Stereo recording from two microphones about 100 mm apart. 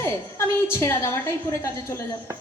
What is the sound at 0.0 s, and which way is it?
Speech, 25° left (ahead or behind).